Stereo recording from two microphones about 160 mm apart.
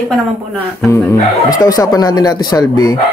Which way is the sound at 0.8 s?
15° left (ahead or behind).